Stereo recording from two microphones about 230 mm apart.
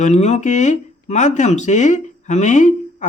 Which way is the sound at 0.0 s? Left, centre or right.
Left.